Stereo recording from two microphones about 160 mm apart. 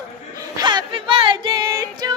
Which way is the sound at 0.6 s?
25° right (ahead or behind).